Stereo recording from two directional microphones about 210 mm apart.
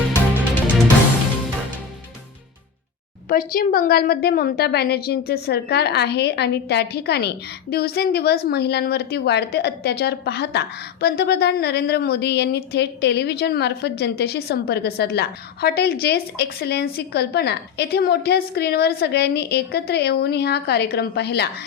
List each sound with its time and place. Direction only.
3.2 s a woman's voice: 40° left (ahead or behind)